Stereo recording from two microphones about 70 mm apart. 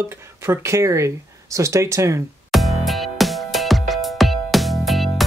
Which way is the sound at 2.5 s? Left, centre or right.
Centre.